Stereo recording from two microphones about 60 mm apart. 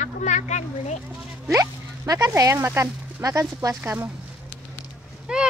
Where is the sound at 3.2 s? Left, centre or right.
Right.